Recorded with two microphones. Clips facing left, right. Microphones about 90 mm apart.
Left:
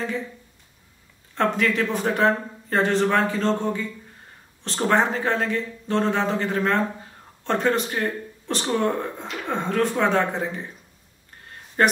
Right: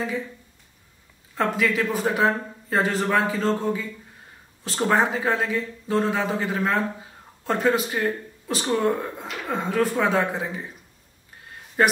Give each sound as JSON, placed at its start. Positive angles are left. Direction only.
{"t": 1.3, "sound": "speech", "side_deg": -5}
{"t": 11.8, "sound": "speech", "side_deg": -5}